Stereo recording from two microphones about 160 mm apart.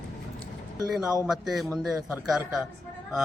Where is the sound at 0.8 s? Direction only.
5° right (ahead or behind).